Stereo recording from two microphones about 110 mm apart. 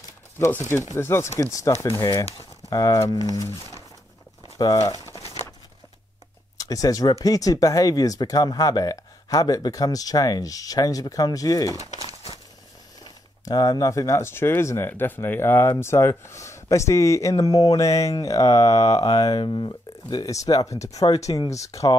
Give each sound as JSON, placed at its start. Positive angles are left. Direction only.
{"t": 0.5, "sound": "speech", "side_deg": 25}
{"t": 4.6, "sound": "speech", "side_deg": 35}
{"t": 6.6, "sound": "speech", "side_deg": 35}
{"t": 13.0, "sound": "speech", "side_deg": 35}